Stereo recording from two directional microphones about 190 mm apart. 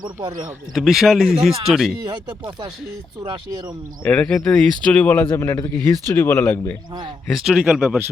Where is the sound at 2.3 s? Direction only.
25° right (ahead or behind).